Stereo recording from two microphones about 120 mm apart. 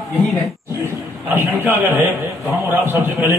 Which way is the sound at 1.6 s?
20° right (ahead or behind).